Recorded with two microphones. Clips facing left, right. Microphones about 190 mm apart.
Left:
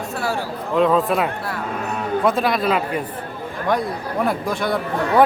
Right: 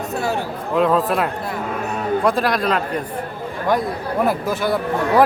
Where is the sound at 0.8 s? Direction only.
Centre (ahead or behind).